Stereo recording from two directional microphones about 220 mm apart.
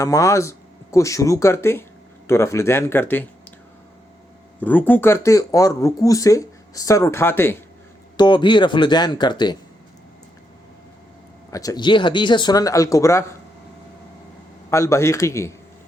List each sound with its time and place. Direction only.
0.0 s speech: 15° left (ahead or behind)
4.6 s speech: 5° left (ahead or behind)
11.5 s speech: 15° left (ahead or behind)
14.7 s speech: 10° left (ahead or behind)